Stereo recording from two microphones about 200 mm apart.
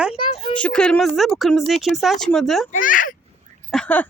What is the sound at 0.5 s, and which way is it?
Speech, 5° left (ahead or behind).